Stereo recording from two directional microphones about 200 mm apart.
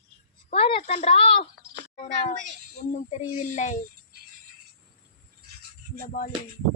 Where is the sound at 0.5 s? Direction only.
30° left (ahead or behind).